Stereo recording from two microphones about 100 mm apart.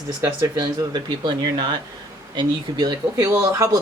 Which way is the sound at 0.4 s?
45° right (ahead or behind).